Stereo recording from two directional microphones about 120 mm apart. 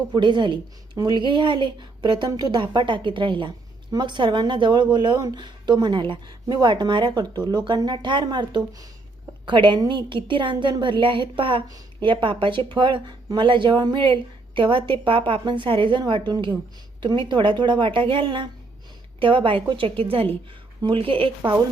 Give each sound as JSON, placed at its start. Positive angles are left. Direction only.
{"t": 0.1, "sound": "a woman's voice", "side_deg": -40}